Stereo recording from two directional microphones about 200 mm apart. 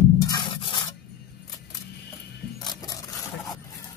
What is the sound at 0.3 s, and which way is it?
Scratch, 25° left (ahead or behind).